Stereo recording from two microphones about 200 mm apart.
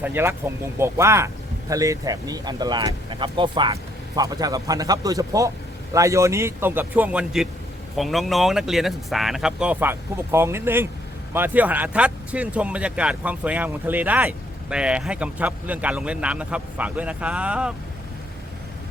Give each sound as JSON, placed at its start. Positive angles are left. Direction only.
{"t": 0.0, "sound": "speech", "side_deg": -10}